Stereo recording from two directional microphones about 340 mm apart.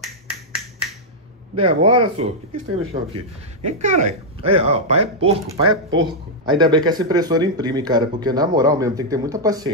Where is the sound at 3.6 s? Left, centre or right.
Centre.